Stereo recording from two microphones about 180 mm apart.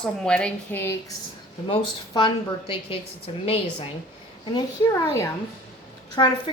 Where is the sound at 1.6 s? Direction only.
25° left (ahead or behind).